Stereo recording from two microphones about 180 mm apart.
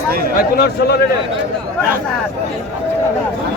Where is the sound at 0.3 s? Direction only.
60° left (ahead or behind).